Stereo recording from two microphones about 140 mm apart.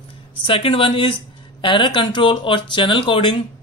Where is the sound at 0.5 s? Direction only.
40° left (ahead or behind).